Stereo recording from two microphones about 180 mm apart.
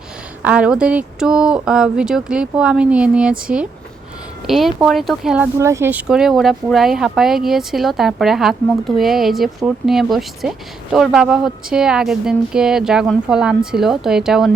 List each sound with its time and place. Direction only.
0.4 s speech: 5° right (ahead or behind)
5.5 s speech: 15° right (ahead or behind)